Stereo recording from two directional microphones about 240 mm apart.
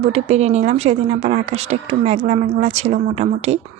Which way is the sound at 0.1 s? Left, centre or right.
Right.